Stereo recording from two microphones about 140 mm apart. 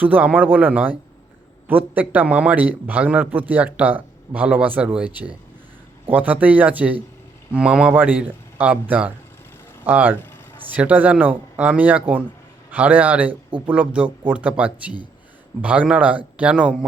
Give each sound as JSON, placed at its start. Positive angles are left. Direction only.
{"t": 0.0, "sound": "a man's voice", "side_deg": -10}